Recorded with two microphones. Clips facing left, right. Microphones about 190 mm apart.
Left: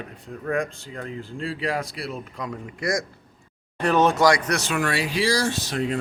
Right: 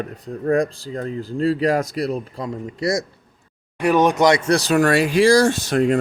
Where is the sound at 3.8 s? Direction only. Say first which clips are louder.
Right 3 dB; 10° right (ahead or behind); by 6.0 s 50° right (ahead or behind).